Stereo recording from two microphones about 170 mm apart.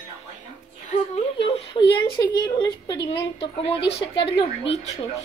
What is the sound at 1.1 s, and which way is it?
A woman's voice, 35° left (ahead or behind).